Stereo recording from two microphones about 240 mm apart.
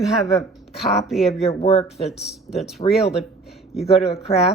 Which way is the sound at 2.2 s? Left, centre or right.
Centre.